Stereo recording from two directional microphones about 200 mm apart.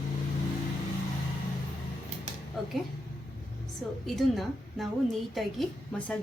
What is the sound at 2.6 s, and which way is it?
Speech, centre (ahead or behind).